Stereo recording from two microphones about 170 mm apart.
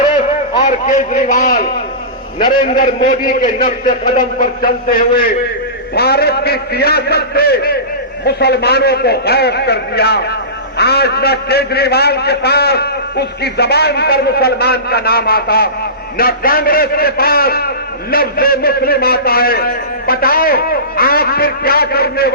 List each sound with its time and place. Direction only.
0.6 s a man's voice: 45° left (ahead or behind)
2.4 s a man's voice: 25° left (ahead or behind)
2.6 s a man's voice: 50° left (ahead or behind); by 22.3 s 65° left (ahead or behind)